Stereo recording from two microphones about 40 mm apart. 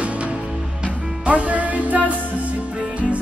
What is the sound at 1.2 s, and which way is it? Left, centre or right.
Music, right.